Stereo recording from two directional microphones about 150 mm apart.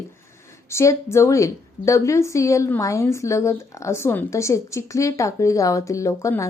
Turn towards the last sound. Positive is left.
turn(degrees=20)  # may be behind; listen again after turning